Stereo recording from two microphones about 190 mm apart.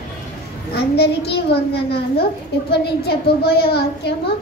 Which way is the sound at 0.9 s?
60° left (ahead or behind).